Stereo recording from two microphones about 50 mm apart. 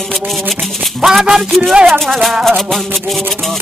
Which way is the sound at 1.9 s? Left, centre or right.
Centre.